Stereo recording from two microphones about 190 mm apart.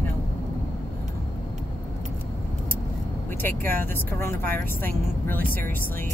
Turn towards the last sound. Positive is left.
turn(degrees=10)  # may be behind; listen again after turning